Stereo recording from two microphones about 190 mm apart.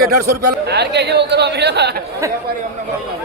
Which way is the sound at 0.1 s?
60° right (ahead or behind).